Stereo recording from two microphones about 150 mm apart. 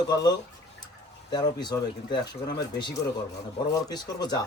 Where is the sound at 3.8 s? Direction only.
25° left (ahead or behind).